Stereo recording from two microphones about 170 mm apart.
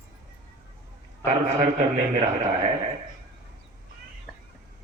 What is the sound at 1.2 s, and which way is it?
A man's voice, 45° right (ahead or behind).